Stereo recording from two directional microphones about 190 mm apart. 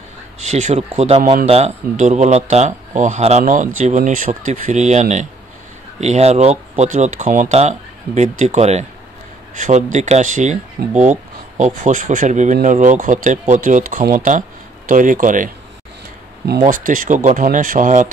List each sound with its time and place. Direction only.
0.4 s speech: 40° right (ahead or behind)